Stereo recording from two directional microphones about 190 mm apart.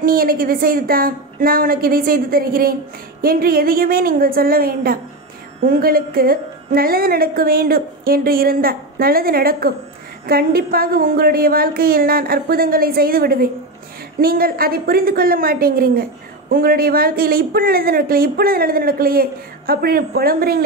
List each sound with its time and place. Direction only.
0.0 s a woman's voice: 50° right (ahead or behind)